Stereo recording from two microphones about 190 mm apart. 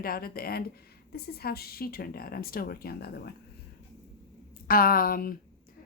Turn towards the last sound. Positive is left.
turn(degrees=50)  # may be behind; listen again after turning